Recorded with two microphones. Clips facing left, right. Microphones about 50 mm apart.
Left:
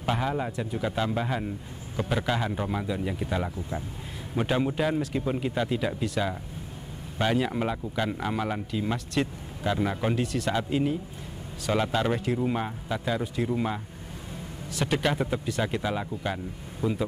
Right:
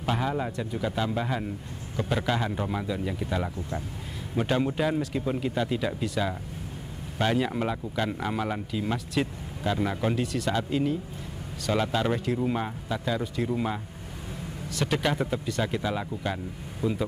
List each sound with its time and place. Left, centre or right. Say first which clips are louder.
0.0 s a man's voice: even; centre
16.8 s speech: even; left